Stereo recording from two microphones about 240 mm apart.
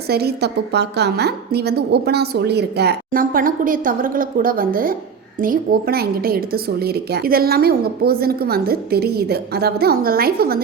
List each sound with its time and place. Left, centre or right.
0.1 s a woman's voice: right